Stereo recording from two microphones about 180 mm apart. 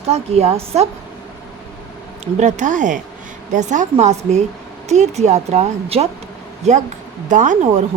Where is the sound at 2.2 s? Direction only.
40° right (ahead or behind).